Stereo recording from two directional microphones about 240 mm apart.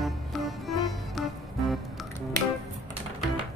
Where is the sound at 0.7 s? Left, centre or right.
Centre.